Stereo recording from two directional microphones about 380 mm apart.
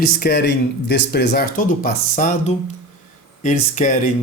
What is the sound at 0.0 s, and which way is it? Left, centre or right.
Speech, left.